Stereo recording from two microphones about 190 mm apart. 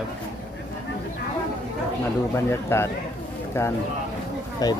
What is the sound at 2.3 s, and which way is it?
Speech, 15° left (ahead or behind).